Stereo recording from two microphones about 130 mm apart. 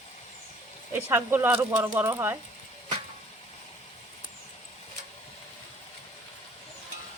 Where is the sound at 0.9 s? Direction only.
15° right (ahead or behind).